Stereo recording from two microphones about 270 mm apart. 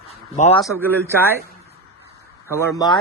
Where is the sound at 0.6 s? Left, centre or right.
Centre.